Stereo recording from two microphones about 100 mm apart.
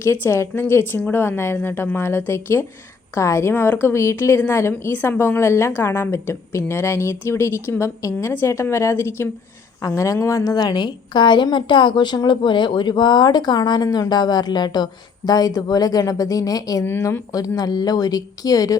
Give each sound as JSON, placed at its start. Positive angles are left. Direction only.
{"t": 0.0, "sound": "a woman's voice", "side_deg": 25}
{"t": 16.8, "sound": "a woman's voice", "side_deg": 25}